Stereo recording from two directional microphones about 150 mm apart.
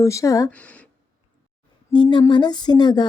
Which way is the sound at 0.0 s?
20° left (ahead or behind).